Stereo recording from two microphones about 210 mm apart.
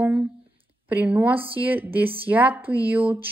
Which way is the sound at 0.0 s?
5° right (ahead or behind).